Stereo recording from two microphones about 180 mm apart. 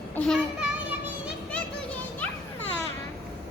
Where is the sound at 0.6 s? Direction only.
5° right (ahead or behind).